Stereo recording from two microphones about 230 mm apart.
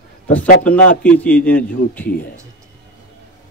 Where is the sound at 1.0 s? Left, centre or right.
Centre.